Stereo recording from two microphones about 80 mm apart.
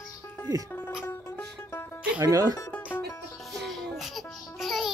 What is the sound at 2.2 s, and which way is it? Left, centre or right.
Speech, right.